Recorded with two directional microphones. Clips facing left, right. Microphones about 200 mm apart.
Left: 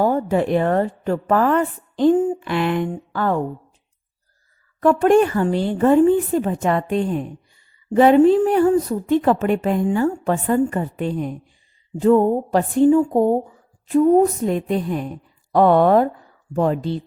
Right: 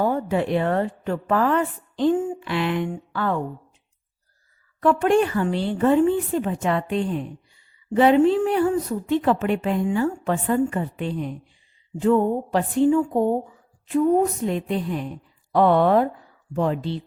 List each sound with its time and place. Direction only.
0.0 s a woman's voice: 40° left (ahead or behind)
4.8 s a woman's voice: 45° left (ahead or behind)